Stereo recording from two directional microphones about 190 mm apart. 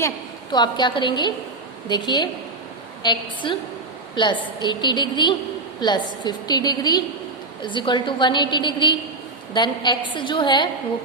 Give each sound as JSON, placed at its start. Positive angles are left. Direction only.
{"t": 0.5, "sound": "a woman's voice", "side_deg": 25}